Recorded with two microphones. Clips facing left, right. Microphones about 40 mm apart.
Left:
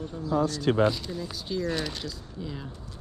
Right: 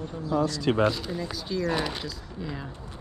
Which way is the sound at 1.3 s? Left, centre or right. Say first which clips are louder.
Right 1 dB; centre.